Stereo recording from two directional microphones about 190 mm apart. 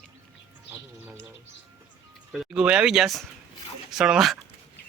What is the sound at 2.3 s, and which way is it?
Speech, centre (ahead or behind).